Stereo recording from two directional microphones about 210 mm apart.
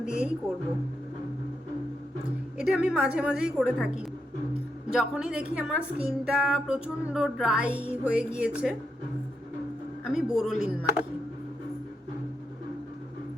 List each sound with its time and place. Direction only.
0.0 s a woman's voice: 5° right (ahead or behind)
2.6 s music: 5° right (ahead or behind)
10.1 s music: centre (ahead or behind)